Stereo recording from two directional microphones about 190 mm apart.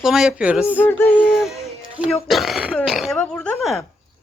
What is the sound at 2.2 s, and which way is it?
A woman's voice, centre (ahead or behind).